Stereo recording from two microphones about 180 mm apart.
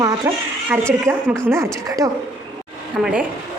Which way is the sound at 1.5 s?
15° right (ahead or behind).